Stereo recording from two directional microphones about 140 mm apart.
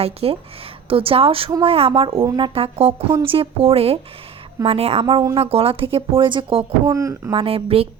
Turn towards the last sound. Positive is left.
turn(degrees=-45)  # may be behind; listen again after turning